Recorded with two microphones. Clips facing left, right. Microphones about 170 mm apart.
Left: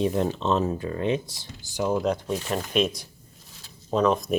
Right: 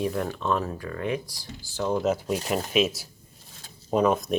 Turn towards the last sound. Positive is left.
turn(degrees=0)  # may be behind; listen again after turning